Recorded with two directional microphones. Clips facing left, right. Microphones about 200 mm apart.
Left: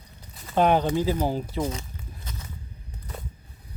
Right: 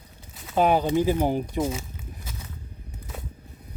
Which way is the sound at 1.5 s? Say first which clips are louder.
Right 2 dB; 10° right (ahead or behind).